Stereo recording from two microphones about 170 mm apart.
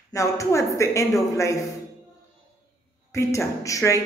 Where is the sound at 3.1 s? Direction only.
15° left (ahead or behind).